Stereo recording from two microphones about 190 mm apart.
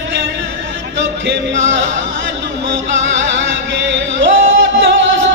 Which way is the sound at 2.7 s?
75° right (ahead or behind).